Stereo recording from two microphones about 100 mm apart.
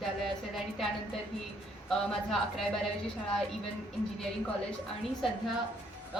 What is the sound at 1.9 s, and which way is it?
Speech, 5° left (ahead or behind).